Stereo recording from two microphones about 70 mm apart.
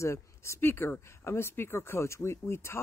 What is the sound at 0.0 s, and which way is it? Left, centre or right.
Speech, left.